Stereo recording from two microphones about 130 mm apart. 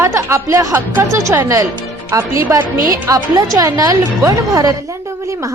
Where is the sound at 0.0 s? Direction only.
20° right (ahead or behind).